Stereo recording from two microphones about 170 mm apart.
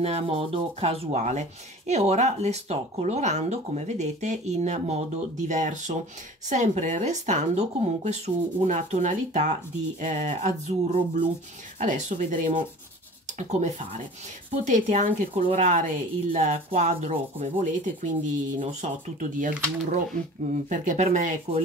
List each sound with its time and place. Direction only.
0.0 s speech: 35° right (ahead or behind)
20.7 s speech: 45° right (ahead or behind)